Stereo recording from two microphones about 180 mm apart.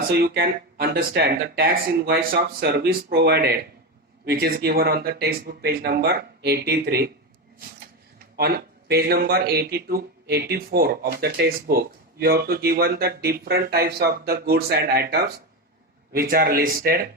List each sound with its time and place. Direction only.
0.1 s speech: 60° right (ahead or behind)
8.4 s speech: 60° right (ahead or behind)